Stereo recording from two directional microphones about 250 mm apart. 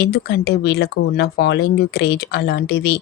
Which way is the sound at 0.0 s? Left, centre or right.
Left.